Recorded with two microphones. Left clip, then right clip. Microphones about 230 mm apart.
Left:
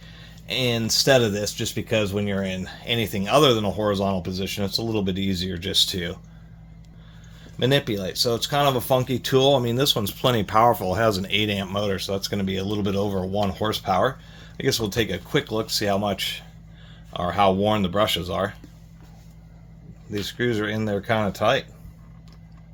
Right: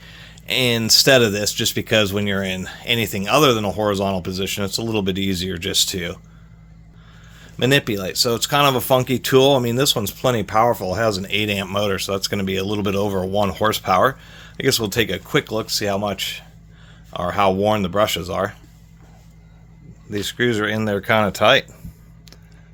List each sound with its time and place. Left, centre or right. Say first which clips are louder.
0.0 s speech: right 5 dB; right
7.5 s speech: right 4 dB; right
20.1 s speech: right 5 dB; right